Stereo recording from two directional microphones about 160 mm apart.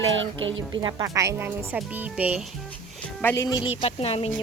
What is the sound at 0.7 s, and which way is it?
Speech, 25° right (ahead or behind).